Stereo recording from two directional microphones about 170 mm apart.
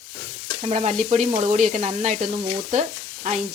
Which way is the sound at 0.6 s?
40° right (ahead or behind).